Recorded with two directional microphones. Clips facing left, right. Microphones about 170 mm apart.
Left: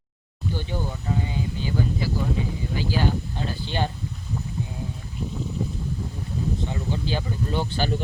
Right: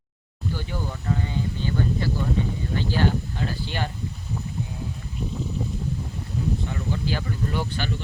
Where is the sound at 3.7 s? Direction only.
25° left (ahead or behind).